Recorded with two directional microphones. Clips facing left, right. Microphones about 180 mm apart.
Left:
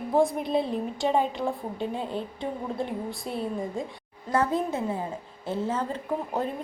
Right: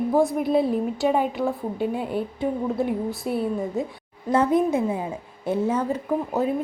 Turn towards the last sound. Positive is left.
turn(degrees=-5)  # may be behind; listen again after turning